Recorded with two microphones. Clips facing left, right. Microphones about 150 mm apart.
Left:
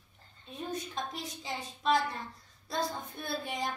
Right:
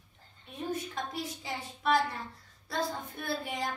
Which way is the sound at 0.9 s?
20° left (ahead or behind).